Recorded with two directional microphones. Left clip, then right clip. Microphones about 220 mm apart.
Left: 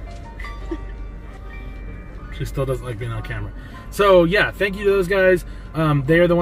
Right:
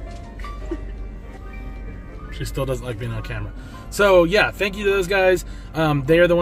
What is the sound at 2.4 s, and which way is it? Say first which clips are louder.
Speech: left 1 dB; centre (ahead or behind).